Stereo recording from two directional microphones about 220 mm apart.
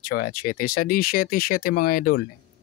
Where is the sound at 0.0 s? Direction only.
40° left (ahead or behind).